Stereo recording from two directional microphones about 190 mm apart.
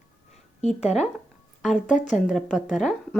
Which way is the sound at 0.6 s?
35° left (ahead or behind).